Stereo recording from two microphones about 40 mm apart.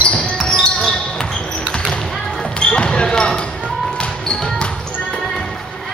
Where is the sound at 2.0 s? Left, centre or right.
Centre.